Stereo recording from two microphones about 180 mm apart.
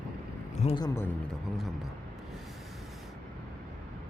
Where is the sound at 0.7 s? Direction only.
20° left (ahead or behind).